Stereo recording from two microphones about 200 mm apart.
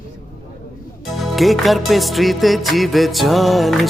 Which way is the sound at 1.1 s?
Centre (ahead or behind).